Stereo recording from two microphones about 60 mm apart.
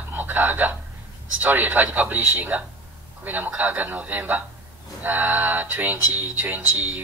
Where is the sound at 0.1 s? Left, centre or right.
Right.